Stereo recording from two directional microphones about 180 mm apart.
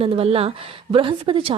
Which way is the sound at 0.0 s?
35° right (ahead or behind).